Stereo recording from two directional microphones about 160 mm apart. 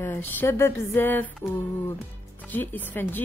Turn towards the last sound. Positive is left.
turn(degrees=10)  # may be behind; listen again after turning